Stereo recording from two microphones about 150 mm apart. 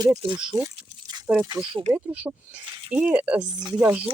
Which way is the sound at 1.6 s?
20° right (ahead or behind).